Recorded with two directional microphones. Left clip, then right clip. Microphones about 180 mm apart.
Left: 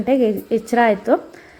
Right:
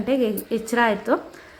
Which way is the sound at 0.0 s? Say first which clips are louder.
Left 5 dB; 15° left (ahead or behind).